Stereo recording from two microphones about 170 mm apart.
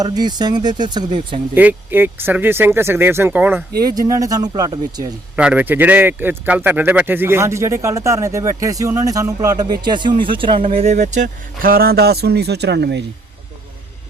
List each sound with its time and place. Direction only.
0.0 s speech: 25° right (ahead or behind)
1.5 s speech: 10° right (ahead or behind)
3.8 s speech: 20° right (ahead or behind)
5.4 s speech: 10° right (ahead or behind); by 13.1 s 85° right